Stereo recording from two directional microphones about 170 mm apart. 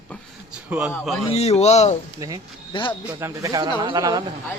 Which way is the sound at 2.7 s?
30° left (ahead or behind).